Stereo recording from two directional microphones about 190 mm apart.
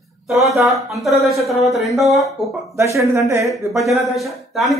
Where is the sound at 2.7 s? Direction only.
15° right (ahead or behind).